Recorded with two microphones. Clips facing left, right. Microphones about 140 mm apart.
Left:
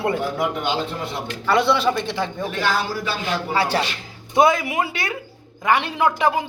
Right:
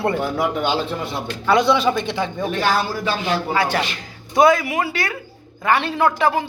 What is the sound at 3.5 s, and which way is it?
Speech, 30° left (ahead or behind).